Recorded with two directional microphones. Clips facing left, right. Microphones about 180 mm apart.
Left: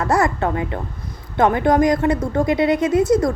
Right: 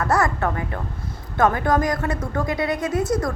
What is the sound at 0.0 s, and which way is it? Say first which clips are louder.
Speech: left 3 dB; 20° left (ahead or behind).